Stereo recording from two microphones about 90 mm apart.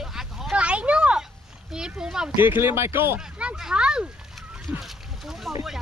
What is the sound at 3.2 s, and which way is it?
Speech, 10° right (ahead or behind).